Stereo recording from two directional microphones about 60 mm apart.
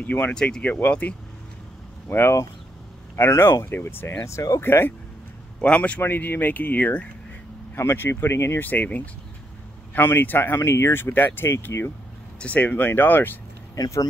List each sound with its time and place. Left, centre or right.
0.0 s speech: left
0.3 s speech: centre
0.7 s speech: left
2.0 s speech: left
4.2 s speech: left
4.6 s speech: left
5.6 s speech: left
6.0 s speech: left
7.7 s speech: left
9.9 s speech: left
12.4 s speech: left
13.7 s speech: left